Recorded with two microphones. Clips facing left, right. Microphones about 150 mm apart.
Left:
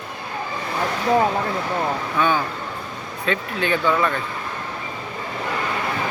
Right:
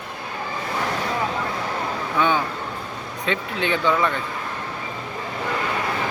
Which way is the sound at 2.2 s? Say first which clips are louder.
Right 1 dB; 20° right (ahead or behind).